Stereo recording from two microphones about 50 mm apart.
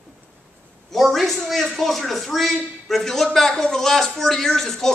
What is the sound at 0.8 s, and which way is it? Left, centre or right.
A man's voice, centre.